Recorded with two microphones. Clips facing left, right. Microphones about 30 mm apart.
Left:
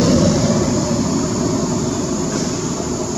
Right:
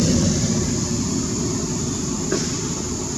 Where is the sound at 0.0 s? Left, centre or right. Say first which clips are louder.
Left 6 dB; left.